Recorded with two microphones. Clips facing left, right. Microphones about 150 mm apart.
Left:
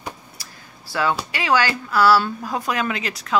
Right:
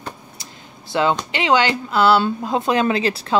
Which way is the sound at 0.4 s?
20° right (ahead or behind).